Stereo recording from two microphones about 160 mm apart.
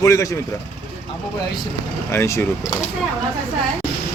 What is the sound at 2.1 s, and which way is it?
Speech, 15° left (ahead or behind).